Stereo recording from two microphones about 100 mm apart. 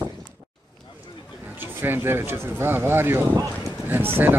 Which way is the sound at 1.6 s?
20° right (ahead or behind).